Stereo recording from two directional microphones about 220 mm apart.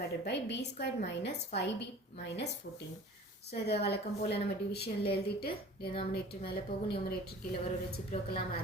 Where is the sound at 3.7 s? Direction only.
50° left (ahead or behind).